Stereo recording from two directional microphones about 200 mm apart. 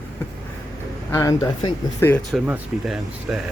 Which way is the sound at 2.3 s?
Centre (ahead or behind).